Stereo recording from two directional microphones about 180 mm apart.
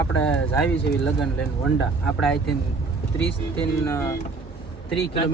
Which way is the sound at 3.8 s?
15° left (ahead or behind).